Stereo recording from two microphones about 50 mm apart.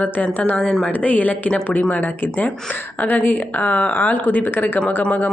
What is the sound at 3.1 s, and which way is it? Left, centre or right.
Speech, left.